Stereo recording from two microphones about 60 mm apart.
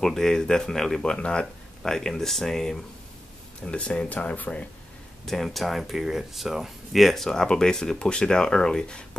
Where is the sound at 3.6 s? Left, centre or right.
Centre.